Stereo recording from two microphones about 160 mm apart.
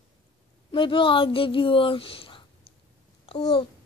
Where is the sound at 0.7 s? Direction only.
30° left (ahead or behind).